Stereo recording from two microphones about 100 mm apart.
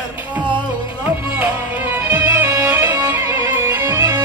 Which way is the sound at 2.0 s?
25° right (ahead or behind).